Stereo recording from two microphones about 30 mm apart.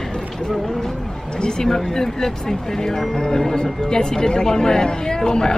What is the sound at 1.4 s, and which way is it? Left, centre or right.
Speech, left.